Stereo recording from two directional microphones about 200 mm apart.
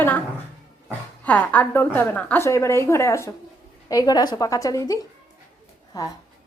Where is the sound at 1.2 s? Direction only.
10° left (ahead or behind).